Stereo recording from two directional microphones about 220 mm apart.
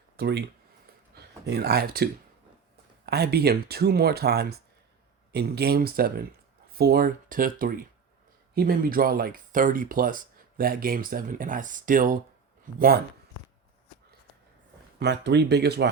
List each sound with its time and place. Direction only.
0.2 s speech: 50° right (ahead or behind)
3.1 s speech: 45° right (ahead or behind)
14.9 s speech: 50° right (ahead or behind)